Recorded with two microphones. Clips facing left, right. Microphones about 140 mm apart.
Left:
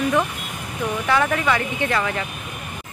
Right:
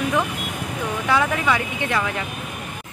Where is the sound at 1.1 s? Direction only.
5° right (ahead or behind).